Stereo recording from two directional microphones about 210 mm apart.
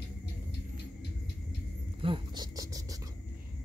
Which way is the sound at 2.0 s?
25° right (ahead or behind).